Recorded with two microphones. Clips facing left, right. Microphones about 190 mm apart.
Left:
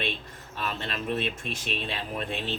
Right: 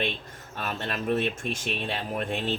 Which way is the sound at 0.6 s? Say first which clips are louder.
Right 2 dB; 45° right (ahead or behind).